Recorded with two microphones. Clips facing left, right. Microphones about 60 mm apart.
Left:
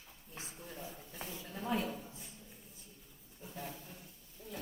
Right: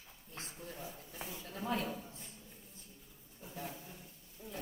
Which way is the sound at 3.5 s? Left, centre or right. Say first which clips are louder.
Right 1 dB; centre.